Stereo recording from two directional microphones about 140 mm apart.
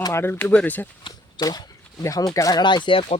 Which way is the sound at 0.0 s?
20° left (ahead or behind).